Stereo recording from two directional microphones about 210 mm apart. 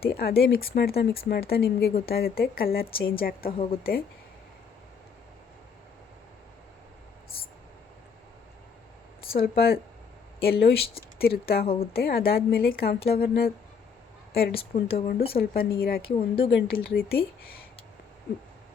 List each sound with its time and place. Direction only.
0.0 s speech: 45° left (ahead or behind)
9.3 s speech: 45° left (ahead or behind)
11.6 s speech: 30° left (ahead or behind)
11.9 s speech: 45° left (ahead or behind)